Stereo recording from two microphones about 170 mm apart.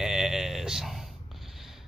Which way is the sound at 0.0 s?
Centre (ahead or behind).